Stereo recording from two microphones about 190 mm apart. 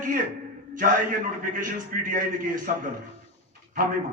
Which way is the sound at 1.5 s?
45° right (ahead or behind).